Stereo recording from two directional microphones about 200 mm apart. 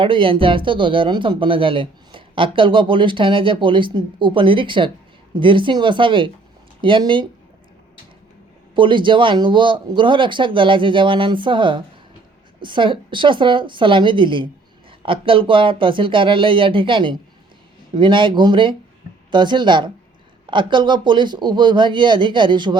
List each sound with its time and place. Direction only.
0.0 s speech: 25° right (ahead or behind)
8.7 s speech: 25° right (ahead or behind)